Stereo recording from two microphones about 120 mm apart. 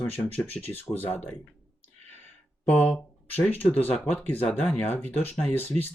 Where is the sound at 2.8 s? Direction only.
15° left (ahead or behind).